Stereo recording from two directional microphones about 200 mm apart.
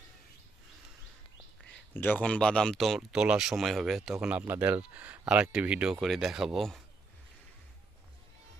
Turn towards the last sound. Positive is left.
turn(degrees=0)  # may be behind; listen again after turning